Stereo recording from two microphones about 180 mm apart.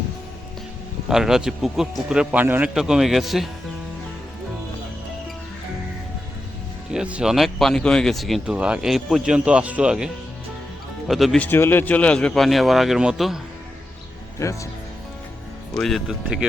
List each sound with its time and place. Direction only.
1.0 s speech: 5° right (ahead or behind)
6.9 s speech: 5° right (ahead or behind)
11.1 s speech: centre (ahead or behind)
14.3 s speech: 15° left (ahead or behind)
15.8 s speech: centre (ahead or behind)